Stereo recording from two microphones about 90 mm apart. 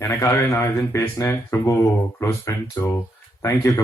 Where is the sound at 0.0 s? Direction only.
35° left (ahead or behind).